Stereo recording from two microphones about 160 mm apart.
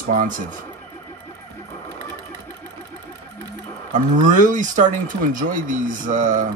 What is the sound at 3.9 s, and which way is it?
Speech, 55° right (ahead or behind).